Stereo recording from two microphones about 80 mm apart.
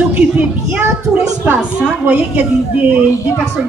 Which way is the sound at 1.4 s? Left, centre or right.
Centre.